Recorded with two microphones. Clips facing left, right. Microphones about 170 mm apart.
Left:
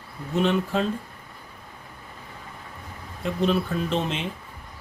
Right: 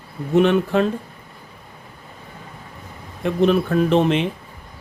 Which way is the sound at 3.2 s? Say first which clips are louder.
Right 6 dB; 65° right (ahead or behind).